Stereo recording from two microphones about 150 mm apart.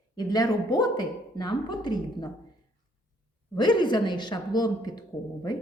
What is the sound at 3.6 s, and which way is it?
A woman's voice, 30° left (ahead or behind).